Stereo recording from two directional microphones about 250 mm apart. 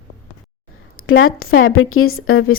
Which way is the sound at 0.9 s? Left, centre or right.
Left.